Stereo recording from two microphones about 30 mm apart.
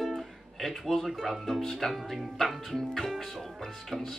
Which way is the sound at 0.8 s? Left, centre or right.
Centre.